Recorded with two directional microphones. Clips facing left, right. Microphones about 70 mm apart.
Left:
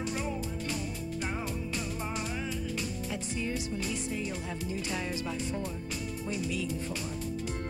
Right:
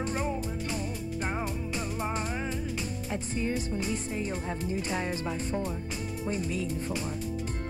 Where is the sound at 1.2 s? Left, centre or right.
Right.